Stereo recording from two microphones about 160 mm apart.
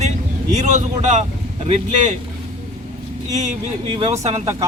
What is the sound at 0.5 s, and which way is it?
A man's voice, 50° right (ahead or behind).